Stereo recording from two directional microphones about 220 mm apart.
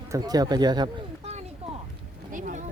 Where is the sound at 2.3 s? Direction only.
35° right (ahead or behind).